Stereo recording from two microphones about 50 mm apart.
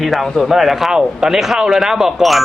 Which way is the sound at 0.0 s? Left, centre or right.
Centre.